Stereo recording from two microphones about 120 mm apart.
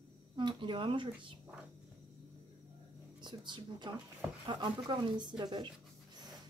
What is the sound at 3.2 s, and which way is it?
A woman's voice, 40° right (ahead or behind).